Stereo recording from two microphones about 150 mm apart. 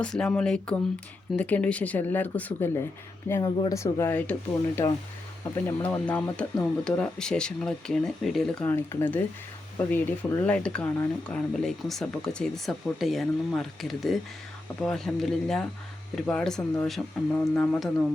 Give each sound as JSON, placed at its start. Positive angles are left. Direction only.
{"t": 0.0, "sound": "speech", "side_deg": 5}
{"t": 8.6, "sound": "speech", "side_deg": 15}